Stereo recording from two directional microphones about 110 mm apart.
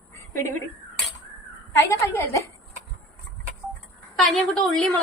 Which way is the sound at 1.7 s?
25° left (ahead or behind).